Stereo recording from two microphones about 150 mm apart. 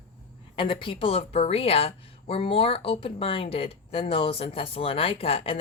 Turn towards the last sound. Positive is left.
turn(degrees=40)  # may be behind; listen again after turning